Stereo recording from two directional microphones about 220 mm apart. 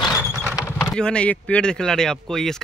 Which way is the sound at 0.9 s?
5° left (ahead or behind).